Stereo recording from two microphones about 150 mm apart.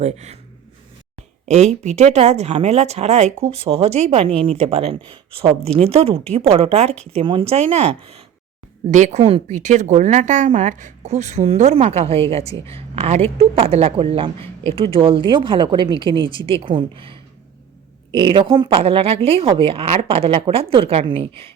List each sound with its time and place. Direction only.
0.0 s speech: 50° right (ahead or behind)
1.5 s speech: 45° right (ahead or behind)
8.9 s speech: 55° right (ahead or behind)
9.2 s a woman's voice: 40° right (ahead or behind)
9.6 s a woman's voice: 55° right (ahead or behind); by 18.8 s 30° right (ahead or behind)
18.8 s a woman's voice: 40° right (ahead or behind)